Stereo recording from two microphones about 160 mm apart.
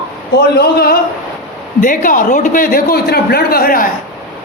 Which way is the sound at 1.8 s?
55° left (ahead or behind).